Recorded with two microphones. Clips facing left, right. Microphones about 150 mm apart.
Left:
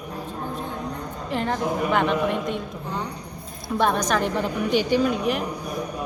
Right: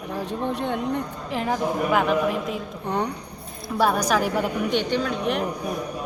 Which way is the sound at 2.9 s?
65° right (ahead or behind).